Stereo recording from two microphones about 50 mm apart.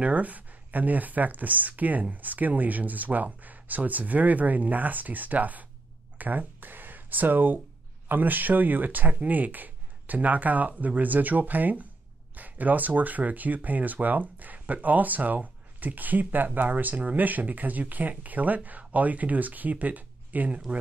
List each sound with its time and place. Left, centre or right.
0.0 s speech: right